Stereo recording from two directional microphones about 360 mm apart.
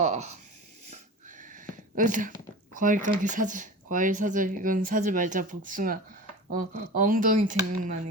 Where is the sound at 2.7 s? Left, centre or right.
Right.